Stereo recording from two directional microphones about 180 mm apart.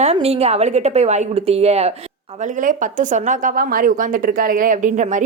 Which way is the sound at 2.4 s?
45° right (ahead or behind).